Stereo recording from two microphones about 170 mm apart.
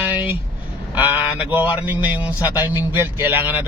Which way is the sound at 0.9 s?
10° right (ahead or behind).